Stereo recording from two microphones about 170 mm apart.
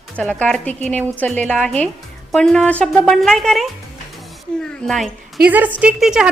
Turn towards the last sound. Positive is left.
turn(degrees=-5)  # may be behind; listen again after turning